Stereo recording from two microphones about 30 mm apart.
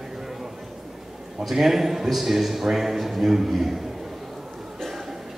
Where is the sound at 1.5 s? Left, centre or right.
Centre.